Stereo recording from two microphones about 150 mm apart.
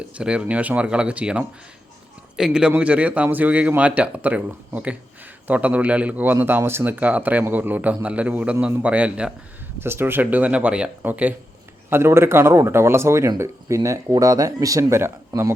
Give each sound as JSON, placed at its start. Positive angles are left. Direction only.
{"t": 0.2, "sound": "speech", "side_deg": -5}